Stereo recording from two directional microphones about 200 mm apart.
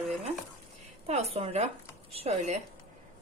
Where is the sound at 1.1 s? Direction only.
30° right (ahead or behind).